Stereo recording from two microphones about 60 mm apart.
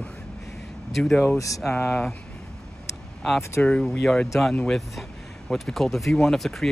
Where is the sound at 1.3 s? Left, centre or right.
Left.